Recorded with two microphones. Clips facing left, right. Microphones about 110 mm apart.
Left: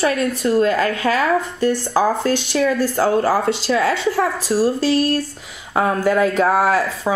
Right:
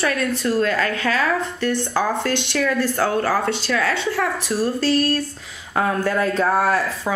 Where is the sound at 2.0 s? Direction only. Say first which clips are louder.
Left 5 dB; 10° left (ahead or behind).